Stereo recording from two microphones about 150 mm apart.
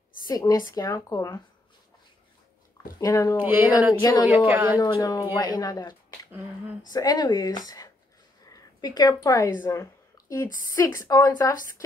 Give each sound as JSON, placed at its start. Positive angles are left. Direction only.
{"t": 0.3, "sound": "a woman's voice", "side_deg": 25}
{"t": 3.0, "sound": "a woman's voice", "side_deg": 20}
{"t": 3.3, "sound": "speech", "side_deg": -10}
{"t": 4.7, "sound": "a woman's voice", "side_deg": 25}